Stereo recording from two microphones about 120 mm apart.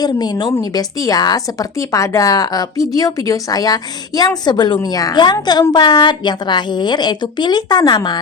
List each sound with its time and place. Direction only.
0.0 s speech: 35° left (ahead or behind)